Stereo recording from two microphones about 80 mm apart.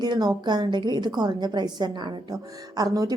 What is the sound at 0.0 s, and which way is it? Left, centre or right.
A woman's voice, right.